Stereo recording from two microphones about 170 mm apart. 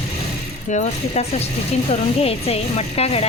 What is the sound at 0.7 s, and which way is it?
A woman's voice, 40° left (ahead or behind).